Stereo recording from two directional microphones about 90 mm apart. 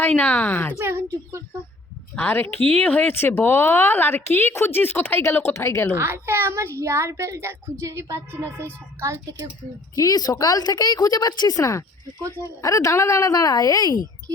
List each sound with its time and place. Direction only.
0.2 s a woman's voice: 20° left (ahead or behind)
0.8 s a woman's voice: 30° right (ahead or behind)
2.1 s a woman's voice: 25° left (ahead or behind)
2.6 s speech: 90° right
2.8 s a woman's voice: 15° left (ahead or behind)
5.9 s a child's voice: 25° right (ahead or behind)
9.9 s a woman's voice: 40° left (ahead or behind)